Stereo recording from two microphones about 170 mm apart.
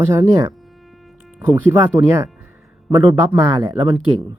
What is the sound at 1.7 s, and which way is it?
Speech, 15° right (ahead or behind).